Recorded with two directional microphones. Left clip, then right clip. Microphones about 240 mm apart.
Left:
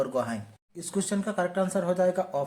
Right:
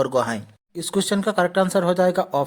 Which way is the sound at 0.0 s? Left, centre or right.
Right.